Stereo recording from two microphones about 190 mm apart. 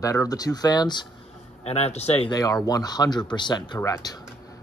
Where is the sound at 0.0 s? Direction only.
15° left (ahead or behind).